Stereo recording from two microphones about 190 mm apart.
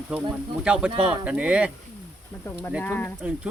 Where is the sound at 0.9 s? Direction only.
25° right (ahead or behind).